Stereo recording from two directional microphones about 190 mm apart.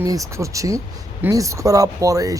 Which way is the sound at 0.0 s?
15° right (ahead or behind).